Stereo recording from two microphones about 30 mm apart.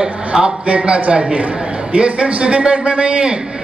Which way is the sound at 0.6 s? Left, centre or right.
Right.